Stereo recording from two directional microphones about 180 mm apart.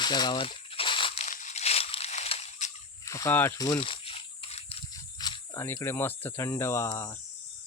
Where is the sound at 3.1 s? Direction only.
15° left (ahead or behind).